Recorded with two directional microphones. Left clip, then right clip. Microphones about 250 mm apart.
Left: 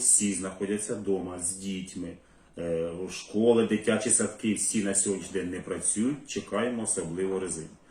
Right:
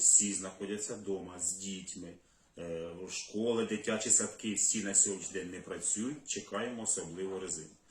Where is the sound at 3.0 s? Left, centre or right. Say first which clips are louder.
Left 10 dB; centre.